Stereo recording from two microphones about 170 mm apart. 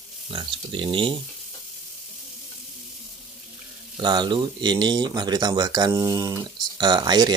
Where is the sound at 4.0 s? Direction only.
25° right (ahead or behind).